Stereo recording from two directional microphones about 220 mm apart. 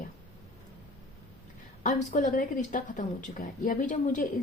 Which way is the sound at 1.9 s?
35° left (ahead or behind).